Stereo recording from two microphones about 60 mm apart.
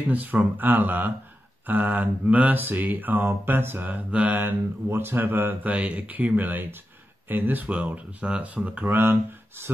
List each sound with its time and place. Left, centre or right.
0.1 s mantra: right
1.7 s speech: right
2.5 s mantra: right
7.6 s speech: right
8.9 s speech: right